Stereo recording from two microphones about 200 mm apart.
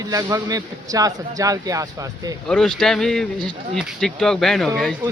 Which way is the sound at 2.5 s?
5° left (ahead or behind).